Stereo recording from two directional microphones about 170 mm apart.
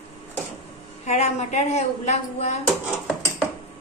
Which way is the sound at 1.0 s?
40° left (ahead or behind).